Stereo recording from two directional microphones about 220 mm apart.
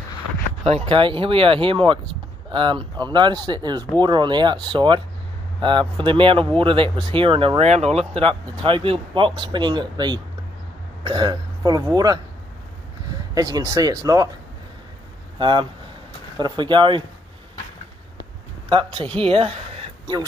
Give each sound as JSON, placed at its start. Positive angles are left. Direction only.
{"t": 0.7, "sound": "speech", "side_deg": -25}
{"t": 13.3, "sound": "speech", "side_deg": -15}
{"t": 15.3, "sound": "speech", "side_deg": -20}
{"t": 18.7, "sound": "speech", "side_deg": -25}